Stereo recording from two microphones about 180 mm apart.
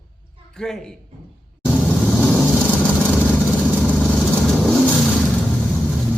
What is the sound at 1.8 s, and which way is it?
Vehicle, centre (ahead or behind).